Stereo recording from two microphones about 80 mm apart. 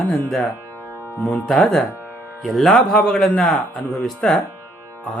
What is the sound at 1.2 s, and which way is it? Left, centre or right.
Speech, centre.